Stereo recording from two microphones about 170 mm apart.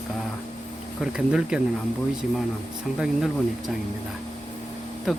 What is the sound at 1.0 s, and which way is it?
Speech, 5° right (ahead or behind).